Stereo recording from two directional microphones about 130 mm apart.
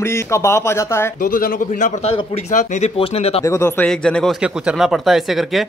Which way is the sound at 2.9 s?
45° left (ahead or behind).